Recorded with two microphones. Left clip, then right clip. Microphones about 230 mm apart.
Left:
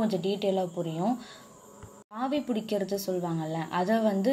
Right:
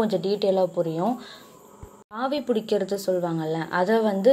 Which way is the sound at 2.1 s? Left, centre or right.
Right.